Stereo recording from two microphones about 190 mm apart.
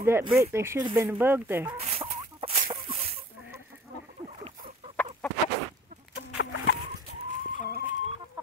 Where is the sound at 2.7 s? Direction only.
30° right (ahead or behind).